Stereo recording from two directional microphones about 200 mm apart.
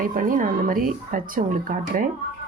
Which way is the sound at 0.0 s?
45° right (ahead or behind).